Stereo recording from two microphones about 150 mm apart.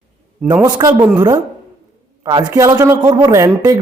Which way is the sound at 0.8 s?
25° right (ahead or behind).